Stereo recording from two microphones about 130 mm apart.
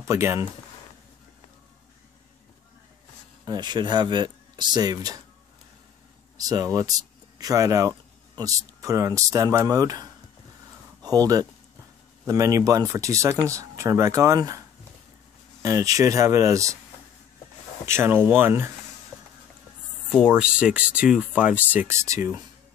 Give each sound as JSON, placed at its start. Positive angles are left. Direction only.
{"t": 0.0, "sound": "speech", "side_deg": -20}
{"t": 3.4, "sound": "speech", "side_deg": -35}
{"t": 6.3, "sound": "speech", "side_deg": -30}
{"t": 15.6, "sound": "speech", "side_deg": -25}
{"t": 17.8, "sound": "speech", "side_deg": -20}
{"t": 20.1, "sound": "speech", "side_deg": -5}